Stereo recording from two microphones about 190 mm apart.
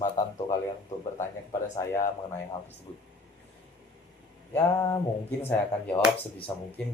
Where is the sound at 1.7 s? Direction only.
15° left (ahead or behind).